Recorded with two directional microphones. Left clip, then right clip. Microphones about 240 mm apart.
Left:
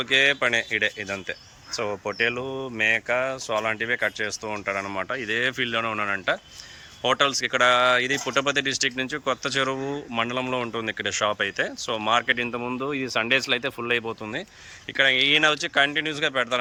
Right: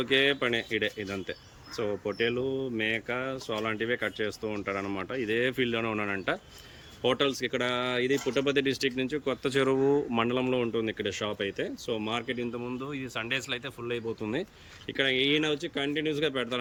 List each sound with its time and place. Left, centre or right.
0.0 s speech: centre
14.9 s speech: centre